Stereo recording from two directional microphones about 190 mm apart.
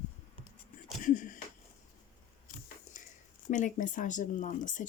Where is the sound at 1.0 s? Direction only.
40° left (ahead or behind).